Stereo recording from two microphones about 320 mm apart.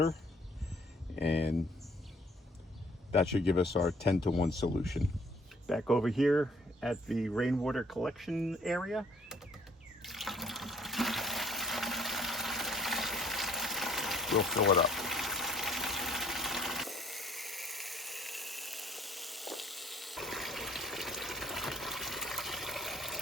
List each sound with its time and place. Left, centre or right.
1.2 s speech: left
4.4 s speech: centre
10.0 s water: centre